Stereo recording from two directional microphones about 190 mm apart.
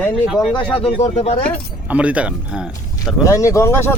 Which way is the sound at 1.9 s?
5° right (ahead or behind).